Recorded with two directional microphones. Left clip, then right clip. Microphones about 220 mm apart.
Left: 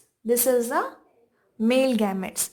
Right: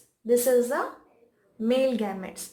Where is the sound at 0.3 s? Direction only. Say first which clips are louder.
Even; 50° left (ahead or behind).